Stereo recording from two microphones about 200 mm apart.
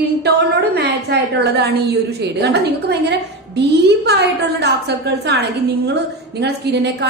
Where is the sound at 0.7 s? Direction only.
55° right (ahead or behind).